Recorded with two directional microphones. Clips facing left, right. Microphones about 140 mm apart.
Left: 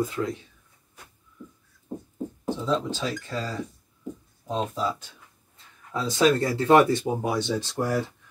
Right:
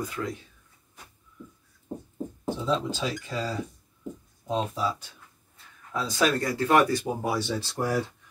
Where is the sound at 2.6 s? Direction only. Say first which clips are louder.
Left 1 dB; 10° right (ahead or behind).